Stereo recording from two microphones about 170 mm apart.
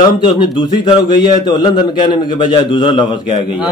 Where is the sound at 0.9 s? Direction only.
25° left (ahead or behind).